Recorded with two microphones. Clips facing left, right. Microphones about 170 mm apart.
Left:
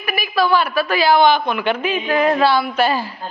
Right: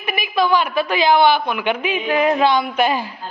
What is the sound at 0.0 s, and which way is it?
A woman's voice, 20° right (ahead or behind).